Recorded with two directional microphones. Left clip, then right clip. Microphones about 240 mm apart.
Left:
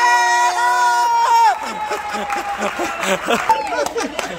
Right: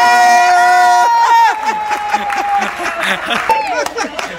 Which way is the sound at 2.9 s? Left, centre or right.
Left.